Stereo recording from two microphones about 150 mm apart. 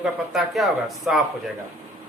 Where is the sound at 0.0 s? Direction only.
Centre (ahead or behind).